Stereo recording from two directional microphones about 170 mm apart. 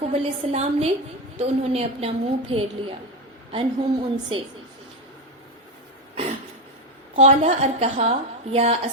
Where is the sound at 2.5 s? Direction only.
35° right (ahead or behind).